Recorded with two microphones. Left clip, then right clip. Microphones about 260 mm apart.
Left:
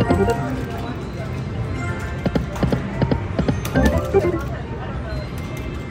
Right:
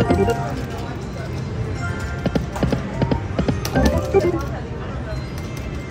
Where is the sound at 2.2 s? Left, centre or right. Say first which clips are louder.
Even; centre.